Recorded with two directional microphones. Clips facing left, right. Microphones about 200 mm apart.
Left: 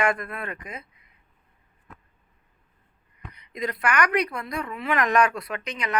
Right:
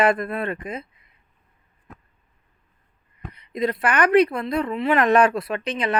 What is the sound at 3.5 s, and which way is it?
Speech, 30° right (ahead or behind).